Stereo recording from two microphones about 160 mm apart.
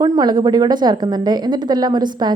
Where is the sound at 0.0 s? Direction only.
25° right (ahead or behind).